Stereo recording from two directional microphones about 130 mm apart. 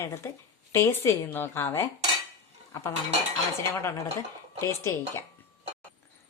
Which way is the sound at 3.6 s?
20° left (ahead or behind).